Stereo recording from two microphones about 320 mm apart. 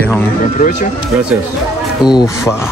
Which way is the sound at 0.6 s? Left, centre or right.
Left.